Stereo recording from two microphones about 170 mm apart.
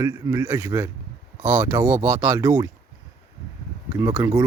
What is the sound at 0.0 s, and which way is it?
Speech, 20° right (ahead or behind).